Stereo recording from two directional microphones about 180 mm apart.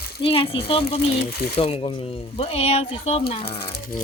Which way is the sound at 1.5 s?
30° left (ahead or behind).